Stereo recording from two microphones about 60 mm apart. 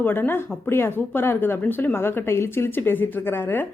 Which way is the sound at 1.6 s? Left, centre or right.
Left.